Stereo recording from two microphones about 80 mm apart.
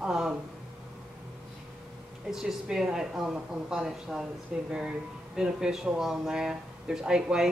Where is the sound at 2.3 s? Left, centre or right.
Centre.